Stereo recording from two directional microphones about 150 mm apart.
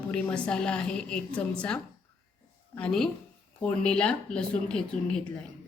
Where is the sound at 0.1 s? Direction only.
10° left (ahead or behind).